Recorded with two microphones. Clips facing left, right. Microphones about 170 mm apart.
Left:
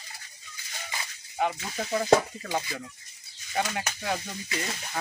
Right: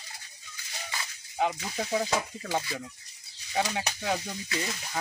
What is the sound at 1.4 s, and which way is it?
Speech, 10° right (ahead or behind).